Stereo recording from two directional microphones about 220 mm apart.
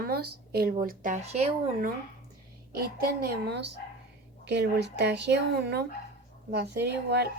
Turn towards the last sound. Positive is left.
turn(degrees=-50)  # may be behind; listen again after turning